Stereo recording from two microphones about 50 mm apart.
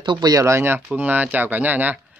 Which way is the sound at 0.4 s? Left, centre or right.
Right.